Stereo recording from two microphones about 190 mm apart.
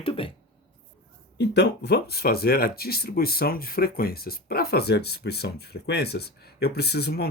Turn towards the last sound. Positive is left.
turn(degrees=55)  # may be behind; listen again after turning